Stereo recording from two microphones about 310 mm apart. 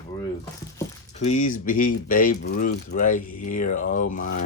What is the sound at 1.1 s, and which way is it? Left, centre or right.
Speech, left.